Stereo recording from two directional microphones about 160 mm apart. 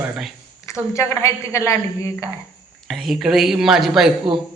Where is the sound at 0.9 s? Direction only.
15° left (ahead or behind).